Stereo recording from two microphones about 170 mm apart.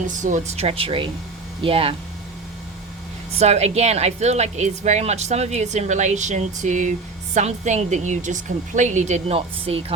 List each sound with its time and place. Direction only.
0.0 s a woman's voice: 45° right (ahead or behind)
3.3 s a woman's voice: 40° right (ahead or behind)